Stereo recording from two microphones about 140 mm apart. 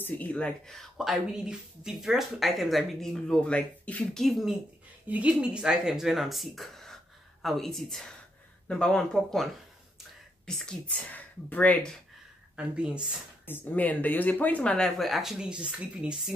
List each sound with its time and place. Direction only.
0.0 s speech: 10° left (ahead or behind)
12.5 s speech: 5° right (ahead or behind)
13.5 s speech: 10° left (ahead or behind); by 16.3 s 5° right (ahead or behind)